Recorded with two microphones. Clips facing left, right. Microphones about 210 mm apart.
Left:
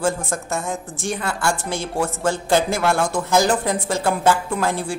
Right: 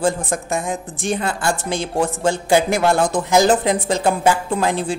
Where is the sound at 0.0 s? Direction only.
15° right (ahead or behind).